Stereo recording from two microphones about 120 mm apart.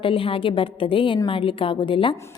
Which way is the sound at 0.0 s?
50° left (ahead or behind).